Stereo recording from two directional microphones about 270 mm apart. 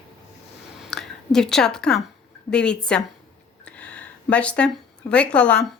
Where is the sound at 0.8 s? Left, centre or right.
Centre.